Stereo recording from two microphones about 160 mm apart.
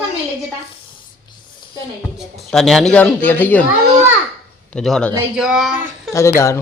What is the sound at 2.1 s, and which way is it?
Speech, centre (ahead or behind).